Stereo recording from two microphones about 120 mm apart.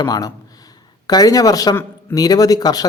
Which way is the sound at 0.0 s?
30° left (ahead or behind).